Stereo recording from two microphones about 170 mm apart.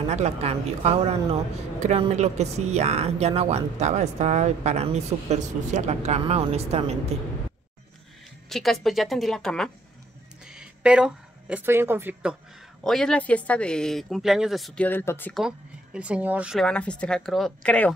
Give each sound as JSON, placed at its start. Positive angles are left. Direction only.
{"t": 0.1, "sound": "speech", "side_deg": -40}
{"t": 8.5, "sound": "speech", "side_deg": 0}
{"t": 12.8, "sound": "speech", "side_deg": 5}
{"t": 14.9, "sound": "speech", "side_deg": 10}
{"t": 15.3, "sound": "speech", "side_deg": -5}